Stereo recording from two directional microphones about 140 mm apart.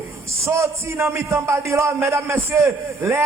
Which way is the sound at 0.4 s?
20° right (ahead or behind).